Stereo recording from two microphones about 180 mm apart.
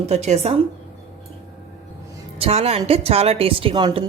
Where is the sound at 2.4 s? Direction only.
35° right (ahead or behind).